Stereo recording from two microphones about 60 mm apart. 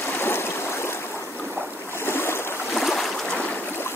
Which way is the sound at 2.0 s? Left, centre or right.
Left.